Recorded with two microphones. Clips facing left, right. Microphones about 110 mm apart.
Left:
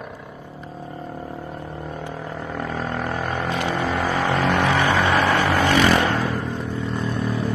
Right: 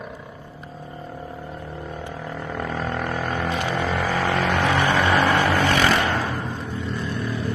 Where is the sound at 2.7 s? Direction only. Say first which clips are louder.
Even; 15° left (ahead or behind).